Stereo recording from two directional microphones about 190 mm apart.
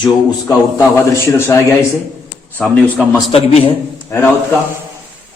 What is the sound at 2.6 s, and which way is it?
Speech, 5° left (ahead or behind).